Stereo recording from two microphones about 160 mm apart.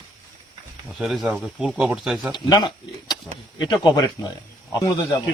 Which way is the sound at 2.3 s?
25° left (ahead or behind).